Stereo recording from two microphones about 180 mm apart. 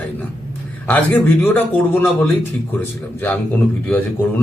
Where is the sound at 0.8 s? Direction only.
10° left (ahead or behind).